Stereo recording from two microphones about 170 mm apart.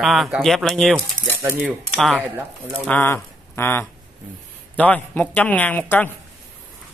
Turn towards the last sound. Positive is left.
turn(degrees=10)  # may be behind; listen again after turning